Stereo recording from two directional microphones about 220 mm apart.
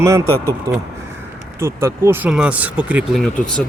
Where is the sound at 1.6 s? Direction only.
10° right (ahead or behind).